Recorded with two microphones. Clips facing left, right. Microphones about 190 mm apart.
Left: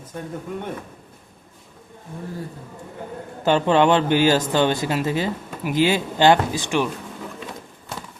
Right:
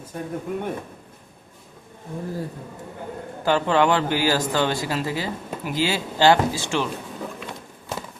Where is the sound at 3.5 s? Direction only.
20° left (ahead or behind).